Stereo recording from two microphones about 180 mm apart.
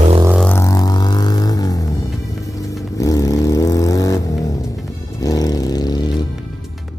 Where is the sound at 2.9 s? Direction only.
20° left (ahead or behind).